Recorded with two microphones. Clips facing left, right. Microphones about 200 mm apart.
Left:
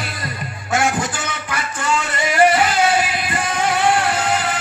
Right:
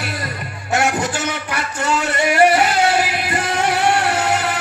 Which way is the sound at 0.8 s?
65° right (ahead or behind).